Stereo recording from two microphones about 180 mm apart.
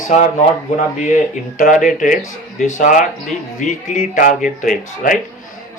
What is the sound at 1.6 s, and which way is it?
Speech, 50° left (ahead or behind).